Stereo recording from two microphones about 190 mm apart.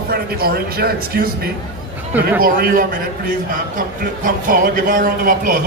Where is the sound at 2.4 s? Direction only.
50° right (ahead or behind).